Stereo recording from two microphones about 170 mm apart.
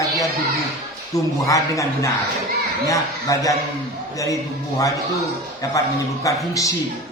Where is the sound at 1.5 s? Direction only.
20° left (ahead or behind).